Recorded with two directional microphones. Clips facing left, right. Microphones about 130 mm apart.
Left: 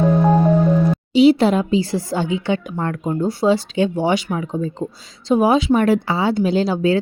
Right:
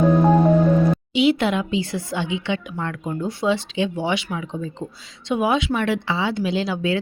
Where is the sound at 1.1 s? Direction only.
35° left (ahead or behind).